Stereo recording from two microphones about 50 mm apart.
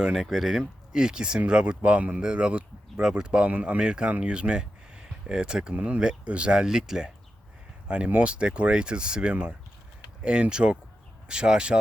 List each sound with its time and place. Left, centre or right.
0.1 s speech: centre
0.9 s speech: centre
3.0 s speech: centre
7.9 s speech: right